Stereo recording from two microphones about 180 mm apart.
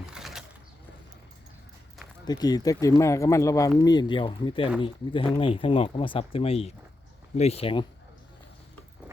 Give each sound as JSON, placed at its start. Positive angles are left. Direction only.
{"t": 0.1, "sound": "bird", "side_deg": 0}
{"t": 2.2, "sound": "speech", "side_deg": 20}